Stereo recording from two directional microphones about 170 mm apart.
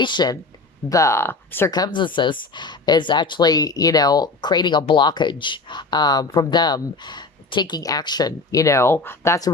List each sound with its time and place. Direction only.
0.0 s speech: 25° left (ahead or behind)
1.7 s speech: 25° left (ahead or behind)